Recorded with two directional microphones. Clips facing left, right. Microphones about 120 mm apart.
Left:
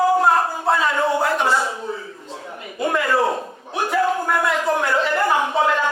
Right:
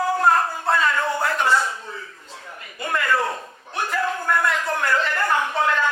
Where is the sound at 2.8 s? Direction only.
5° left (ahead or behind).